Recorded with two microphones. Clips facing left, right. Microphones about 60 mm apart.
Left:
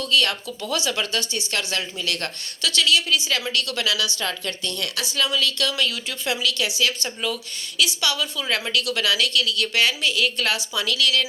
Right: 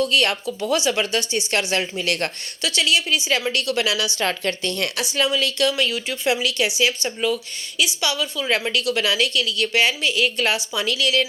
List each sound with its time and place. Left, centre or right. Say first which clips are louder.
0.0 s speech: right 3 dB; right
2.6 s a woman's voice: even; centre
4.2 s a woman's voice: right 5 dB; right
5.1 s a woman's voice: right 1 dB; right